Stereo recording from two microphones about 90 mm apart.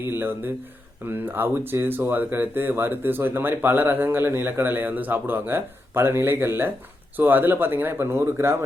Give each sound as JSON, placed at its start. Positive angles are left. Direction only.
{"t": 0.0, "sound": "speech", "side_deg": -25}